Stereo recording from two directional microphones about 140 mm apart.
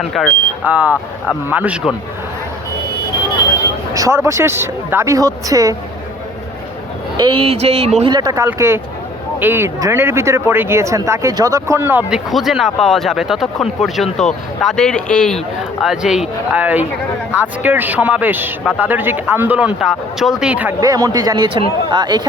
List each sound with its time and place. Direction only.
0.0 s speech: centre (ahead or behind)
0.6 s speech: 10° right (ahead or behind)
3.9 s speech: 20° right (ahead or behind)
7.2 s speech: 40° right (ahead or behind)
8.1 s speech: 25° right (ahead or behind)
12.3 s speech: centre (ahead or behind)
20.8 s speech: 25° right (ahead or behind)